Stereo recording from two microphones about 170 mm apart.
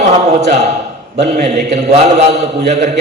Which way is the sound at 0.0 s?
40° right (ahead or behind).